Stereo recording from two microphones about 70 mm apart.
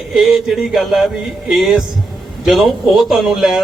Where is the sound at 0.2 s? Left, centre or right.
Centre.